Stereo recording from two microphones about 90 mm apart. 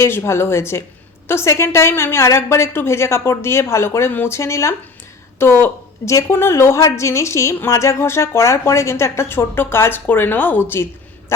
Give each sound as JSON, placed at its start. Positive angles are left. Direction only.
{"t": 0.0, "sound": "a woman's voice", "side_deg": 30}